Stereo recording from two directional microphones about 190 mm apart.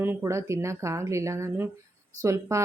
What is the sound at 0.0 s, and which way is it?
Speech, 10° right (ahead or behind).